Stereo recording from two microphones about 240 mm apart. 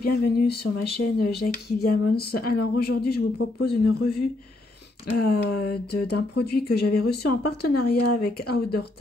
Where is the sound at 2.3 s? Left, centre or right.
Left.